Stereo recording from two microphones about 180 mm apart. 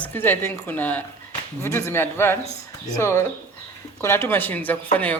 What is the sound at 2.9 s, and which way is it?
Speech, 15° left (ahead or behind).